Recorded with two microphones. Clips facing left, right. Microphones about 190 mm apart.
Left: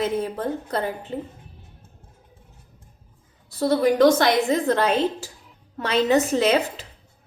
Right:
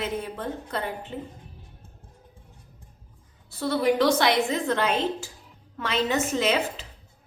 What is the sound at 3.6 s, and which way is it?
A woman's voice, 40° left (ahead or behind).